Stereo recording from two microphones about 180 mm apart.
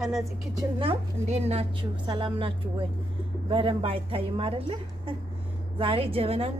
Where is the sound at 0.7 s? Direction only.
35° right (ahead or behind).